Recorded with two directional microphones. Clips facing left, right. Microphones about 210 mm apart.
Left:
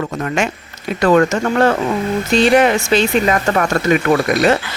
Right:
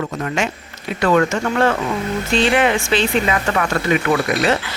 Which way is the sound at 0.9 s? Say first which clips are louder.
Left 3 dB; 40° left (ahead or behind).